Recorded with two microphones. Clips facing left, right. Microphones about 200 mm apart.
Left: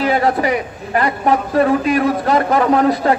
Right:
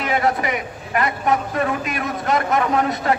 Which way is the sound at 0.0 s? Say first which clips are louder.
Left 5 dB; 35° left (ahead or behind).